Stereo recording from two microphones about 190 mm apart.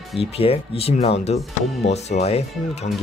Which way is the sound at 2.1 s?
45° left (ahead or behind).